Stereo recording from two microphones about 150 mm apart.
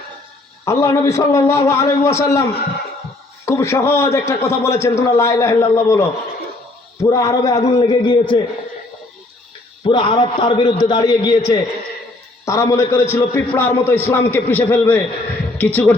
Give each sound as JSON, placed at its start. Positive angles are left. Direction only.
{"t": 0.6, "sound": "a man's voice", "side_deg": 20}
{"t": 9.8, "sound": "a man's voice", "side_deg": 35}